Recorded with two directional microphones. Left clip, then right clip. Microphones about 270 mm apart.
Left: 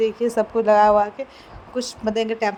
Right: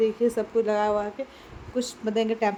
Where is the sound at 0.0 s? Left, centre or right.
Centre.